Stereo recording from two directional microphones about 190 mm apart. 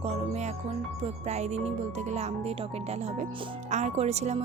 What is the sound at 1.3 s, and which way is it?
Speech, 35° right (ahead or behind).